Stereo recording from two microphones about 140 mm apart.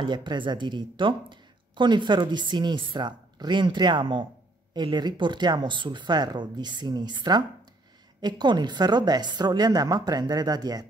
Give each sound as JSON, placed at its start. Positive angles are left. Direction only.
{"t": 0.0, "sound": "a woman's voice", "side_deg": -30}